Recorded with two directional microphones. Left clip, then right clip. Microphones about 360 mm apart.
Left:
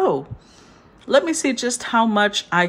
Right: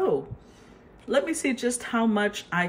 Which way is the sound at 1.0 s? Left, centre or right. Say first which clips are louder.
Left 7 dB; centre.